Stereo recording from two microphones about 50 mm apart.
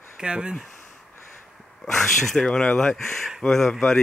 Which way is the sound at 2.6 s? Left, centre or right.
Centre.